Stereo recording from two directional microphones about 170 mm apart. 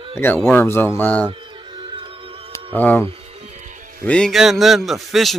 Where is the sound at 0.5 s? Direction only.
15° left (ahead or behind).